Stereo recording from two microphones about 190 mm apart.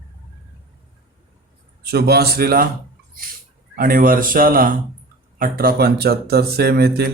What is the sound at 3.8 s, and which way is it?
Speech, 50° right (ahead or behind).